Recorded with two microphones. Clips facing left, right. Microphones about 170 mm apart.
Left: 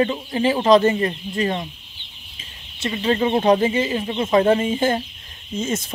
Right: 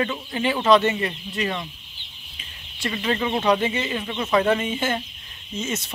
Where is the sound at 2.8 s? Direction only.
30° left (ahead or behind).